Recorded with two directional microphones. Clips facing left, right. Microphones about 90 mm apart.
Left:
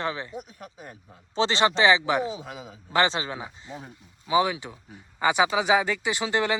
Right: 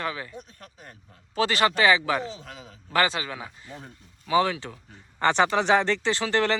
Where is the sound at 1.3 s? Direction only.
25° left (ahead or behind).